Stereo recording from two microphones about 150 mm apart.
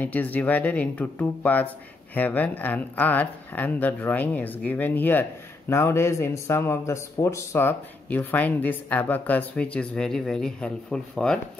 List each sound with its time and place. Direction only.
0.0 s speech: 10° left (ahead or behind)